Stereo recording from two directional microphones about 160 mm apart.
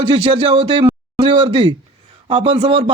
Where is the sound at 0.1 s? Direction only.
35° right (ahead or behind).